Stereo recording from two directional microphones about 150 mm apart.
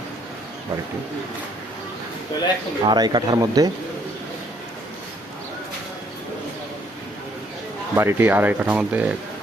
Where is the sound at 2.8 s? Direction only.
30° right (ahead or behind).